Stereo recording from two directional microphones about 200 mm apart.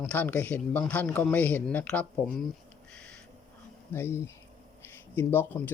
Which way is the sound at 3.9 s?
10° left (ahead or behind).